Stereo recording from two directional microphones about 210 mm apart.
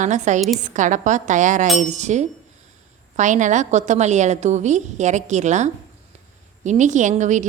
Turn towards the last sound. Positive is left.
turn(degrees=-35)  # may be behind; listen again after turning